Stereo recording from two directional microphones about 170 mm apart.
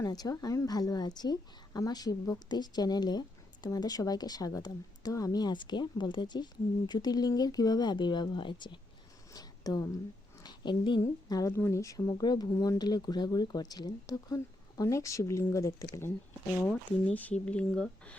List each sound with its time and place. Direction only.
0.0 s a woman's voice: 20° left (ahead or behind)
9.3 s a sound: 20° left (ahead or behind)
10.4 s a woman's voice: 25° left (ahead or behind); by 18.2 s 5° left (ahead or behind)